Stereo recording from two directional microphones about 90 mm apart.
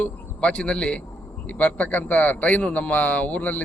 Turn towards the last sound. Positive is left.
turn(degrees=20)  # may be behind; listen again after turning